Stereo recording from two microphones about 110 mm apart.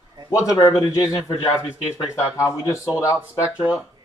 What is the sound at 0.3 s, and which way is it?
A man's voice, 30° left (ahead or behind).